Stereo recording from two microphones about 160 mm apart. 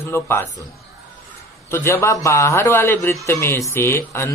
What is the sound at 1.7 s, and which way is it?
A man's voice, 15° left (ahead or behind).